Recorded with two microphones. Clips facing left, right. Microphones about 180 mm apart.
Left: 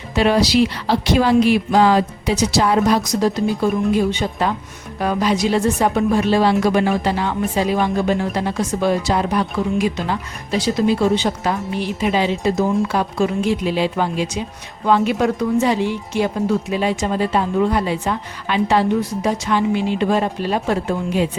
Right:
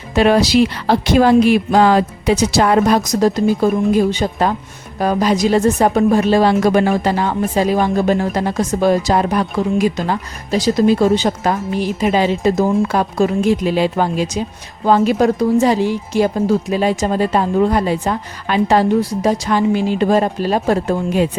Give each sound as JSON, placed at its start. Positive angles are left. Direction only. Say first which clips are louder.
{"t": 0.1, "sound": "speech", "louder": "right 3 dB", "side_deg": -50}